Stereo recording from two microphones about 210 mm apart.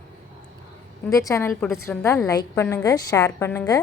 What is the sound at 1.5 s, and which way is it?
Speech, centre (ahead or behind).